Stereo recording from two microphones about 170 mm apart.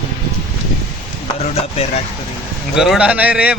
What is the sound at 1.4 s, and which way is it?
Speech, 35° left (ahead or behind).